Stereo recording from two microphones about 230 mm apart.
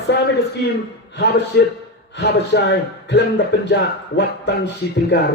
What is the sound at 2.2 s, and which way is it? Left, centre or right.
A man's voice, left.